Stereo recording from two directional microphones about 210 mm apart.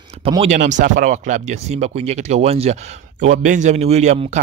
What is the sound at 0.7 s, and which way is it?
Speech, 35° right (ahead or behind).